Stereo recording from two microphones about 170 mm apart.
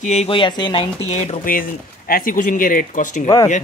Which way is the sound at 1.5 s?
55° left (ahead or behind).